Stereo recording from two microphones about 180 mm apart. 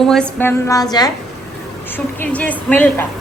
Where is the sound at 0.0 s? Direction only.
5° left (ahead or behind); by 1.1 s 20° left (ahead or behind).